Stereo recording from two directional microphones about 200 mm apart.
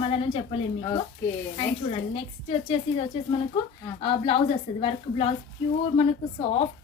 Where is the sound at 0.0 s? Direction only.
30° left (ahead or behind).